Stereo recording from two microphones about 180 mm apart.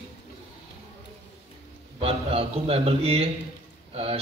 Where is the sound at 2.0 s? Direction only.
30° right (ahead or behind).